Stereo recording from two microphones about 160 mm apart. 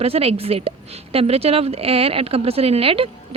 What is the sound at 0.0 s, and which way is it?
Speech, 40° right (ahead or behind).